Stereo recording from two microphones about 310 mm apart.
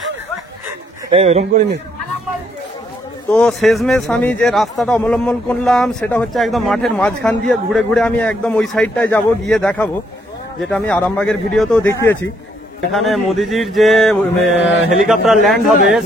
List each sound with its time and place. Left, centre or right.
1.1 s speech: right
3.3 s speech: centre